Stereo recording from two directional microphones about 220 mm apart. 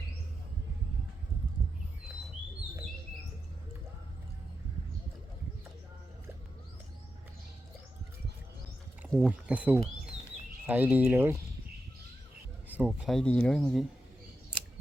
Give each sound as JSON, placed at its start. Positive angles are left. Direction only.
{"t": 9.1, "sound": "speech", "side_deg": -5}
{"t": 12.6, "sound": "speech", "side_deg": -5}